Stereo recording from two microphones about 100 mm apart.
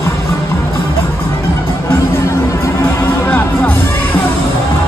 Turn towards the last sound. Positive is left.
turn(degrees=20)  # may be behind; listen again after turning